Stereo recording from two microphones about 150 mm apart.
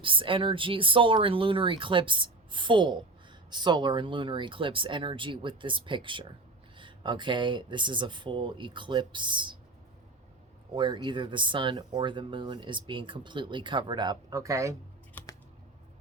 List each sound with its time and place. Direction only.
0.0 s speech: 35° right (ahead or behind)
10.8 s speech: 30° right (ahead or behind)